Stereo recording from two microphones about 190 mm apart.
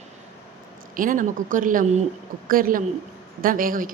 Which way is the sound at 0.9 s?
45° right (ahead or behind).